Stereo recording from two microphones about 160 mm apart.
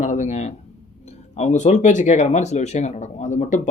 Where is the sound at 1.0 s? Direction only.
45° left (ahead or behind).